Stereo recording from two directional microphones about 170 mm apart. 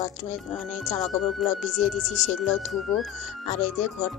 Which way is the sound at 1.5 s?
45° left (ahead or behind).